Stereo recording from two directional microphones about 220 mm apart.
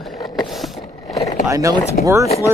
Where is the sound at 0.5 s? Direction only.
Centre (ahead or behind).